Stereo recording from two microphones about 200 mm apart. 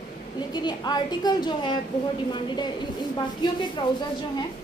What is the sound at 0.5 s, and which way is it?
A woman's voice, 20° left (ahead or behind).